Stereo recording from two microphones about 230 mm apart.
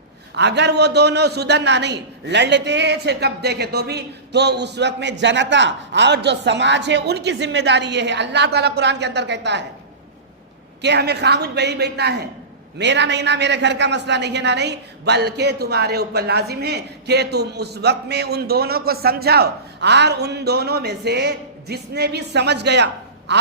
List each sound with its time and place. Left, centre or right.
0.3 s a woman's voice: right
10.8 s a woman's voice: right
23.3 s a sound: right